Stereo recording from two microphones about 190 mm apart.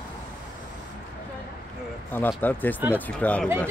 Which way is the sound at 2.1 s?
10° left (ahead or behind).